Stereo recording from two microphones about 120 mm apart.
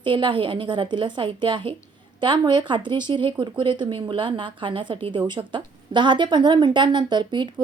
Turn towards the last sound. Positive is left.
turn(degrees=-40)  # may be behind; listen again after turning